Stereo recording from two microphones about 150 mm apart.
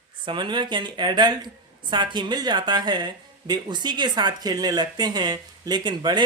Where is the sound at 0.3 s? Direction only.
30° right (ahead or behind).